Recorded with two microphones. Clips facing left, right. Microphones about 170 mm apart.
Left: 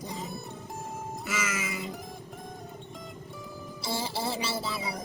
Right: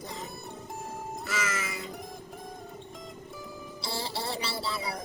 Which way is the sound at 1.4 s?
15° left (ahead or behind).